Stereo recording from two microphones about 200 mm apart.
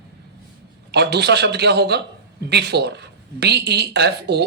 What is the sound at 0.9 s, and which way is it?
A man's voice, 55° right (ahead or behind).